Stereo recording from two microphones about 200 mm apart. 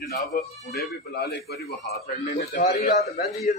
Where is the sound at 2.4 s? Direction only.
50° left (ahead or behind).